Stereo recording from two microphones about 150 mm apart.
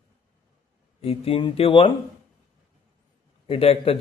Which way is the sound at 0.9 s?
40° left (ahead or behind).